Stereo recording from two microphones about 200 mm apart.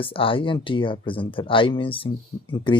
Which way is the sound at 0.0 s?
25° left (ahead or behind).